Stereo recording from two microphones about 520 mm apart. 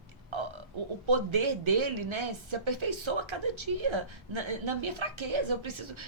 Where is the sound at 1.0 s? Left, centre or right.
Right.